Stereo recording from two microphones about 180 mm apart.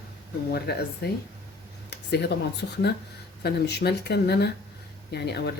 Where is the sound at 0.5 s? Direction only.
60° left (ahead or behind).